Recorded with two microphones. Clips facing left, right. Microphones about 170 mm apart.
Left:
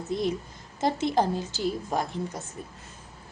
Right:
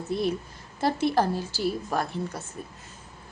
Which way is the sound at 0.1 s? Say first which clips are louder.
Right 1 dB; 15° left (ahead or behind).